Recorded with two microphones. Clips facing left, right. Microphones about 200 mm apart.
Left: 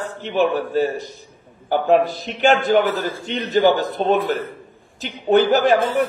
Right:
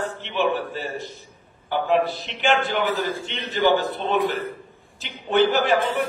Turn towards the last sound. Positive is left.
turn(degrees=40)  # may be behind; listen again after turning